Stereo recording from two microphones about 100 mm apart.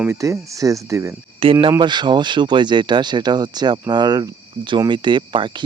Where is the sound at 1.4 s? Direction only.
65° right (ahead or behind).